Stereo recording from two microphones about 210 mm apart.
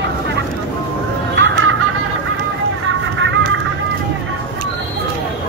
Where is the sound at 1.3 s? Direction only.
65° right (ahead or behind).